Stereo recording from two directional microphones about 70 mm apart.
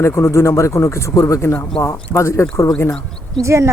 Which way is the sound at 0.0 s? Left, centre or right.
Left.